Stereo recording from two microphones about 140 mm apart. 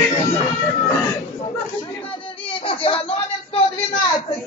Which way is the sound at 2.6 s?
40° left (ahead or behind).